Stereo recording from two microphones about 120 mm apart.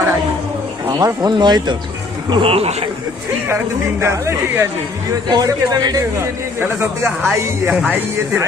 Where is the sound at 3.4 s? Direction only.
20° right (ahead or behind).